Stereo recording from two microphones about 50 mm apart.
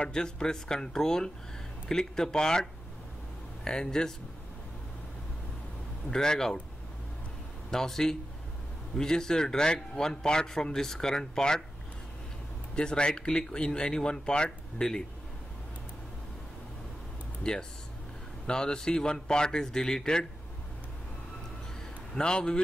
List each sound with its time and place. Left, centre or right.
0.0 s a man's voice: centre
6.0 s a man's voice: centre
7.7 s a man's voice: centre
12.7 s a man's voice: centre
17.4 s a man's voice: centre
22.1 s a man's voice: centre